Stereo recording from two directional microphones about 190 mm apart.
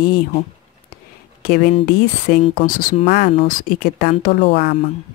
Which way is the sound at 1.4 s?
50° left (ahead or behind).